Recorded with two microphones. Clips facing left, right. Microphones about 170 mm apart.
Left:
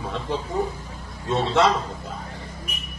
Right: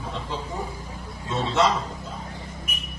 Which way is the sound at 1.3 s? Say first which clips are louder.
Left 3 dB; 60° left (ahead or behind).